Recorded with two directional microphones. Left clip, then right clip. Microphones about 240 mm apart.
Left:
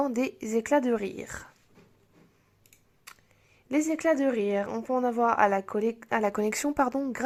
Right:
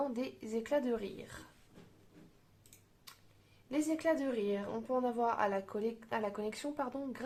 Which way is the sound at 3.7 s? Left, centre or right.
Left.